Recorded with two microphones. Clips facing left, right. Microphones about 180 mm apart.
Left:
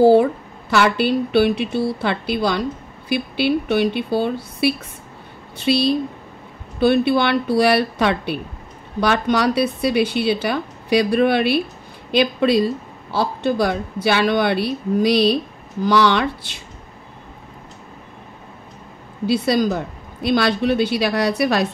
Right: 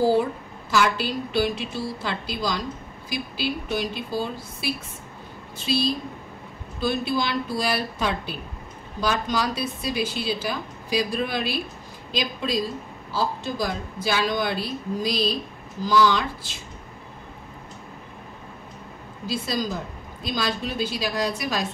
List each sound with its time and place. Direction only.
0.0 s speech: 60° left (ahead or behind)
19.2 s speech: 65° left (ahead or behind)